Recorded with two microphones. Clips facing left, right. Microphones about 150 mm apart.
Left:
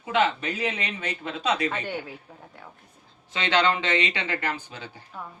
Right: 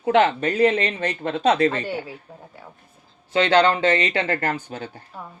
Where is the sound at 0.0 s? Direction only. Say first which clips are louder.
Right 6 dB; 55° right (ahead or behind).